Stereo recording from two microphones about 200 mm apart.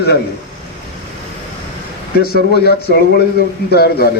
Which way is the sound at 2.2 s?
50° left (ahead or behind).